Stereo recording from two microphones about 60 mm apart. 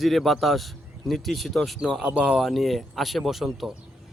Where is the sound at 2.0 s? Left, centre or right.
Centre.